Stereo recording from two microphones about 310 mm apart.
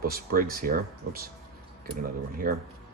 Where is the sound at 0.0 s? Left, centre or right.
Right.